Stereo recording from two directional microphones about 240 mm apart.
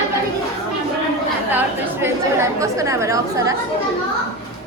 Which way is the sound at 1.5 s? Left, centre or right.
Centre.